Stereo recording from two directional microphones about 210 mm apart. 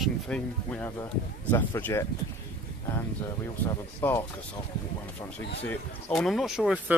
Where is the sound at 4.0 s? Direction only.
10° left (ahead or behind).